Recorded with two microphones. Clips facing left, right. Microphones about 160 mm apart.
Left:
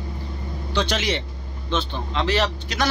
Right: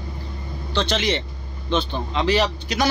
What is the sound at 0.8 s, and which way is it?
A man's voice, 5° left (ahead or behind).